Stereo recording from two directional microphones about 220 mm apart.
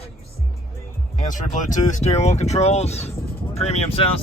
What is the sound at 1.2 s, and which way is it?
Speech, 35° left (ahead or behind).